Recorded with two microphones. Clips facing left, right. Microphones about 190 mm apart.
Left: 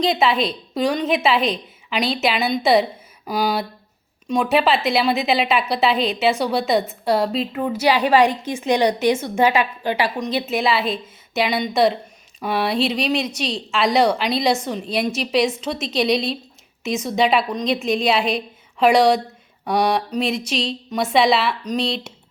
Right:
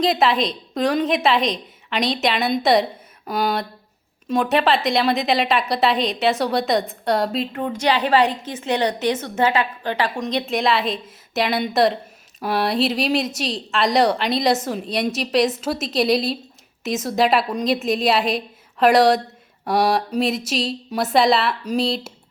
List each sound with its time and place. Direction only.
0.0 s a woman's voice: centre (ahead or behind)